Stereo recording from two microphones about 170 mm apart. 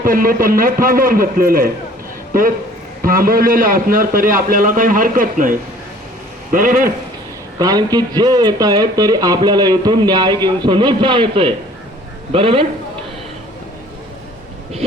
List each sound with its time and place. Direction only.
0.0 s a man's voice: 55° right (ahead or behind)
3.0 s a man's voice: 55° right (ahead or behind)
7.6 s a man's voice: 20° right (ahead or behind)